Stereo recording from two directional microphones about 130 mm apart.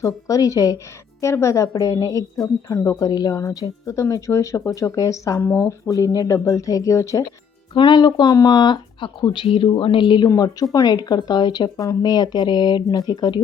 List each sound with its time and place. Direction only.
0.0 s speech: 25° left (ahead or behind)
7.7 s speech: 35° left (ahead or behind)